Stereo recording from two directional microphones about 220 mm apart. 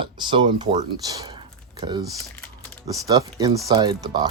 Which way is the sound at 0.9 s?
15° right (ahead or behind).